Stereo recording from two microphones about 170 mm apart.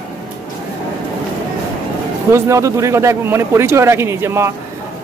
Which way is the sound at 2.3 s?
20° right (ahead or behind).